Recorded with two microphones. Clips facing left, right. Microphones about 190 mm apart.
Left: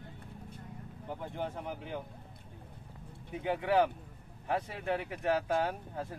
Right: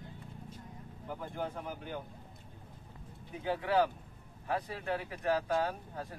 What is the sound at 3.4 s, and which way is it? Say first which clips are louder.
Speech: left 1 dB; 20° left (ahead or behind).